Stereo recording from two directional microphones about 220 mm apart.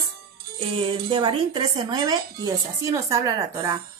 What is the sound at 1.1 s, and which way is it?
Speech, 20° right (ahead or behind).